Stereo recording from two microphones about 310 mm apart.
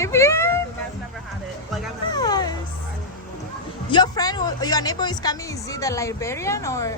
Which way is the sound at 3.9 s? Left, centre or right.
Centre.